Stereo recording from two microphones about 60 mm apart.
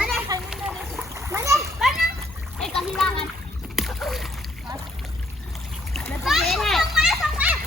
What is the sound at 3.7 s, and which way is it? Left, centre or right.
Splash, centre.